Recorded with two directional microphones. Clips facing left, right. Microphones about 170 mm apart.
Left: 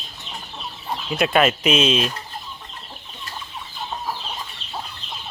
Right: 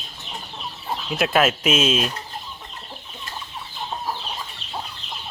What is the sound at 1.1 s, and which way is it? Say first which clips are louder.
Speech: left 1 dB; centre (ahead or behind).